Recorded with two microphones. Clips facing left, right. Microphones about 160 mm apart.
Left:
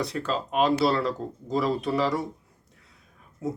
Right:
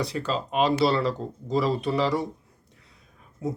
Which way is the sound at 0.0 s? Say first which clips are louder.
Even; centre (ahead or behind).